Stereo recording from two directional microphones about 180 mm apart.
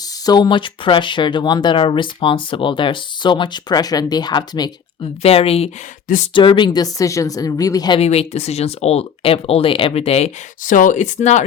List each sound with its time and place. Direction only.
0.3 s speech: 25° left (ahead or behind)
5.2 s speech: 35° left (ahead or behind)
8.0 s speech: 35° left (ahead or behind)